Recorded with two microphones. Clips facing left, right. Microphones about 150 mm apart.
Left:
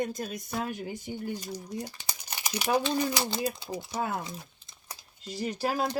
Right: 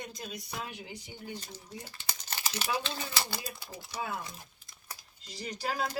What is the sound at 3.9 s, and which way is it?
Speech, 50° left (ahead or behind).